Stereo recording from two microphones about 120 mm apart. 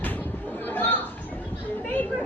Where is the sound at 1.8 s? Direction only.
15° left (ahead or behind).